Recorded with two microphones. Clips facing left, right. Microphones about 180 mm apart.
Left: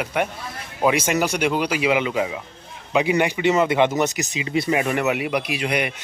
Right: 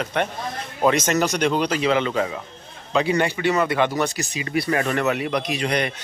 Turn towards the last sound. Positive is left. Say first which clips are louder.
# even
turn(degrees=10)  # may be behind; listen again after turning